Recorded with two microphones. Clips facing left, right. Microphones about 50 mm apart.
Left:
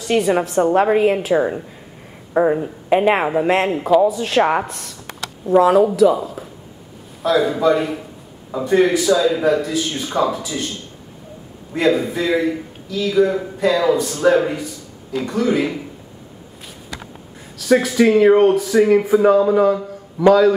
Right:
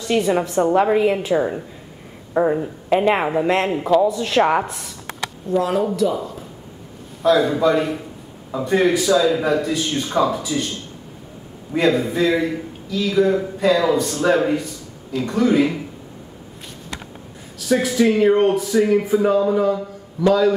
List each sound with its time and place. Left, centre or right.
0.1 s a man's voice: centre
11.7 s a man's voice: centre
17.8 s a man's voice: centre
18.8 s a man's voice: centre